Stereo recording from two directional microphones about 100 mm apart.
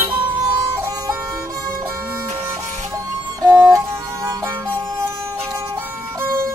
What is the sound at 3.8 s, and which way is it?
Music, 30° right (ahead or behind).